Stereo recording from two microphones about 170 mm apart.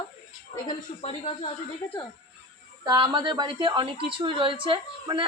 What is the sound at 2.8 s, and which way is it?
A woman's voice, 20° right (ahead or behind).